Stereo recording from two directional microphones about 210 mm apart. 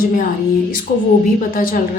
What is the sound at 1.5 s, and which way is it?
Speech, 40° left (ahead or behind).